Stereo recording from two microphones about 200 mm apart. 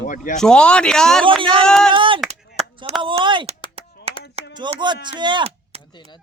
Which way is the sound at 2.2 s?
30° right (ahead or behind).